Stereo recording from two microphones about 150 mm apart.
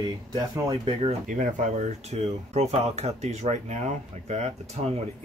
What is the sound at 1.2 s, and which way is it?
Speech, 60° right (ahead or behind).